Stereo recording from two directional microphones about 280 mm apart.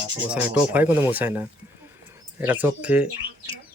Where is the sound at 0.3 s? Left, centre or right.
Centre.